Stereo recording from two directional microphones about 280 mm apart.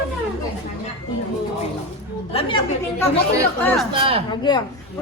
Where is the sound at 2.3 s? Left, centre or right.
Centre.